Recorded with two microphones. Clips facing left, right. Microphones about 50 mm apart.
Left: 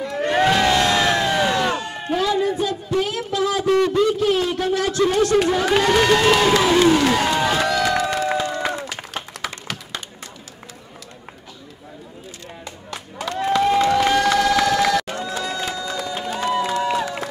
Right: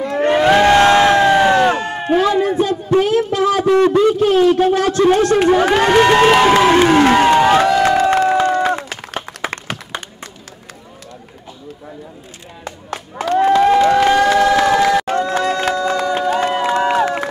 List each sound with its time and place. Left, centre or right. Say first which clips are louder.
0.0 s crowd: right 5 dB; right
3.6 s a man's voice: right 5 dB; right
8.0 s music: right 8 dB; right
8.4 s run: right 8 dB; right
9.4 s tap: right 7 dB; right
9.9 s a sound: right 6 dB; right
13.3 s a sound: right 7 dB; right
14.0 s crowd: right 5 dB; right
15.0 s crowd: right 9 dB; right